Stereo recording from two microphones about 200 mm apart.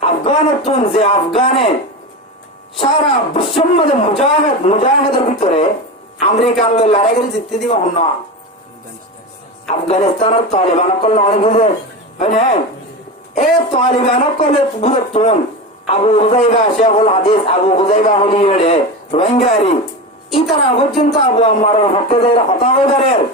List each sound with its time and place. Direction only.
0.0 s speech: 30° left (ahead or behind)
3.3 s speech: 30° left (ahead or behind)
9.6 s speech: 30° left (ahead or behind)
20.7 s speech: 30° left (ahead or behind)